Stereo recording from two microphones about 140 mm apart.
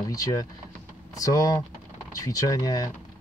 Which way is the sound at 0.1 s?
25° left (ahead or behind).